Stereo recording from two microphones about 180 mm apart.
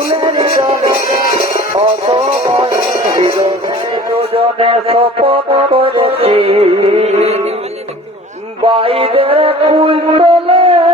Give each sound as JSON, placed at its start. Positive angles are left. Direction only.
{"t": 0.2, "sound": "music", "side_deg": -30}
{"t": 4.2, "sound": "music", "side_deg": -30}
{"t": 8.6, "sound": "music", "side_deg": -30}